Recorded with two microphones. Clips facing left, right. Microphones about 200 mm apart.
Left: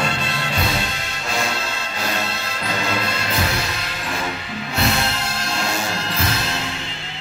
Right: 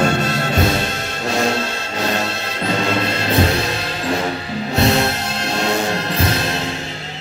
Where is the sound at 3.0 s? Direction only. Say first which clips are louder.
Right 7 dB; 35° right (ahead or behind).